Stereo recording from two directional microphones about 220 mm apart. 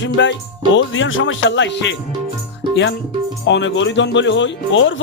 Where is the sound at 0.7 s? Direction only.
60° left (ahead or behind).